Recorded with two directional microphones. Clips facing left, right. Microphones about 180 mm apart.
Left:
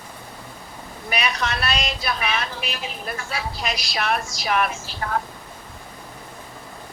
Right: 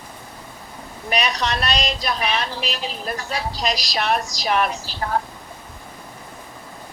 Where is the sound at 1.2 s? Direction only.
35° right (ahead or behind).